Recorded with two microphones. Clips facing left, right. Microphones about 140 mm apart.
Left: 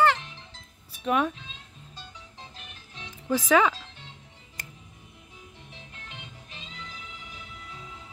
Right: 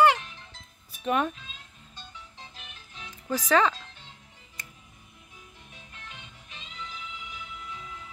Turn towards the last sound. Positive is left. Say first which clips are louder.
# left 2 dB
turn(degrees=30)  # may be behind; listen again after turning